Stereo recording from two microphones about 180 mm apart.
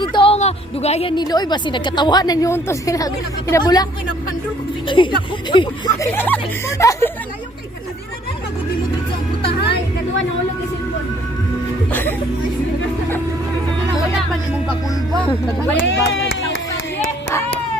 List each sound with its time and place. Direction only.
0.0 s a sound: 25° left (ahead or behind)
1.1 s a woman's voice: 20° left (ahead or behind)
5.0 s a woman's voice: 25° left (ahead or behind)
6.1 s speech: 10° left (ahead or behind)
11.9 s music: 10° left (ahead or behind)
15.1 s speech: 5° left (ahead or behind)
15.9 s a sound: 90° left